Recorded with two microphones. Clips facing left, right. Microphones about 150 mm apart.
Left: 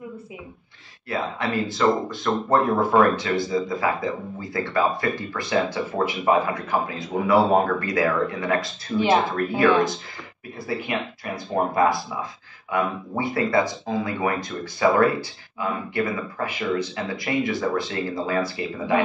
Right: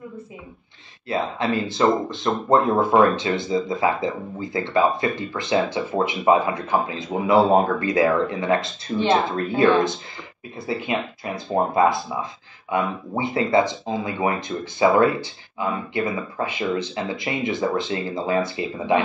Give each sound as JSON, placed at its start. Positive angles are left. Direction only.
{"t": 1.0, "sound": "speech", "side_deg": -25}